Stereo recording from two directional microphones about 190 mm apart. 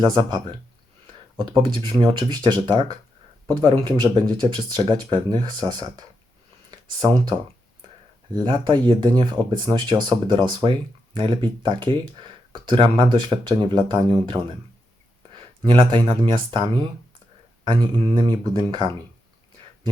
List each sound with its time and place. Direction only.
0.0 s speech: 25° right (ahead or behind)